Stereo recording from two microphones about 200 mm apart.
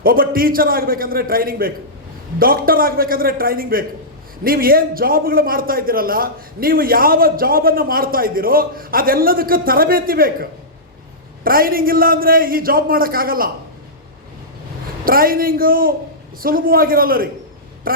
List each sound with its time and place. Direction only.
0.0 s a man's voice: 45° right (ahead or behind)
11.4 s a man's voice: 45° right (ahead or behind)
15.0 s a man's voice: 45° right (ahead or behind)